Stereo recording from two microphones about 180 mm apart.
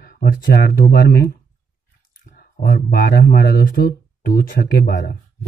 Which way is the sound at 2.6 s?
55° left (ahead or behind).